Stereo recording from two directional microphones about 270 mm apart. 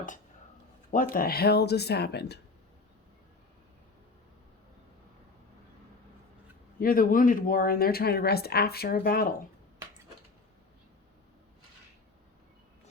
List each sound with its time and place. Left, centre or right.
1.1 s speech: left
6.7 s speech: left